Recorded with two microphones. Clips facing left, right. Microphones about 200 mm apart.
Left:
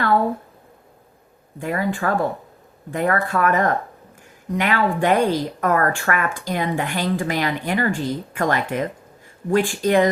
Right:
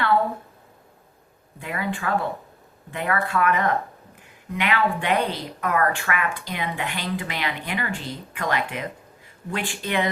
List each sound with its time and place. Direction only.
1.5 s a woman's voice: 45° left (ahead or behind)